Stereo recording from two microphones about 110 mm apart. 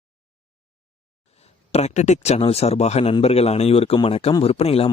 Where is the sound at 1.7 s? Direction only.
85° left.